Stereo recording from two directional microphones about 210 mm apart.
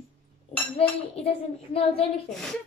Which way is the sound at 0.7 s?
25° left (ahead or behind).